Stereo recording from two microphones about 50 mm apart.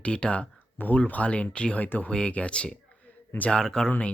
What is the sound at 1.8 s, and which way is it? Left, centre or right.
Speech, left.